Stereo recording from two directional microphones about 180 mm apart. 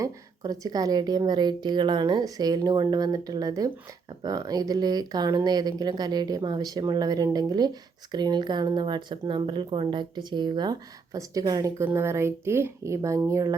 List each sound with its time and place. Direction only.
0.0 s a woman's voice: 20° right (ahead or behind)